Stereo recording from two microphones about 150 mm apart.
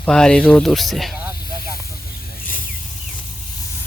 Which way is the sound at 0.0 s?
5° left (ahead or behind).